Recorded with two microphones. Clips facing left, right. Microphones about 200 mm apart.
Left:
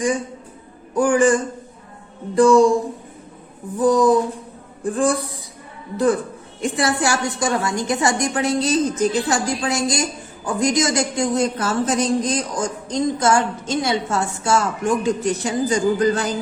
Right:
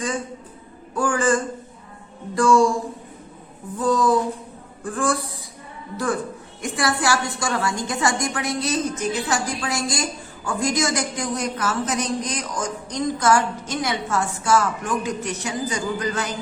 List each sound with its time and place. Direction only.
0.9 s a woman's voice: 20° left (ahead or behind)
3.8 s a woman's voice: 15° left (ahead or behind)
6.6 s a woman's voice: 25° left (ahead or behind)